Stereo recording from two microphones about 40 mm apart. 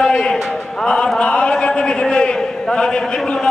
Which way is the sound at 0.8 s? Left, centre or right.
Centre.